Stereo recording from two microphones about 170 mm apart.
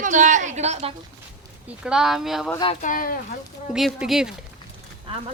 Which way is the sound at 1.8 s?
5° right (ahead or behind).